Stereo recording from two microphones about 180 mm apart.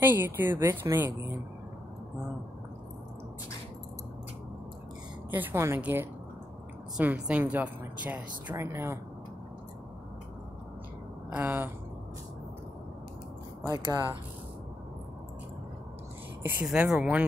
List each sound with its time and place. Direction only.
0.0 s a woman's voice: 10° right (ahead or behind)
5.3 s a woman's voice: 10° right (ahead or behind)
11.2 s speech: 10° right (ahead or behind)
13.7 s speech: 20° right (ahead or behind)
16.6 s speech: 5° right (ahead or behind)